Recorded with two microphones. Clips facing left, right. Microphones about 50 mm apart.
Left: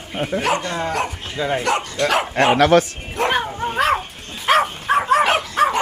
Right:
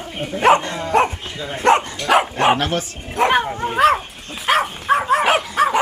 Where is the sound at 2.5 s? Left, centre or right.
Left.